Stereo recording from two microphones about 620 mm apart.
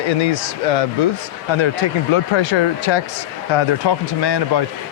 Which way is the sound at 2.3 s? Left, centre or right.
Left.